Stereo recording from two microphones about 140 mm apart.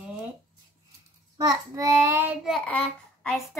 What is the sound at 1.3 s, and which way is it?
Child singing, 25° right (ahead or behind).